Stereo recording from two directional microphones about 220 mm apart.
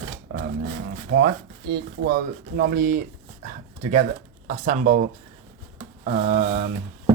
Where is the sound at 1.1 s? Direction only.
50° right (ahead or behind).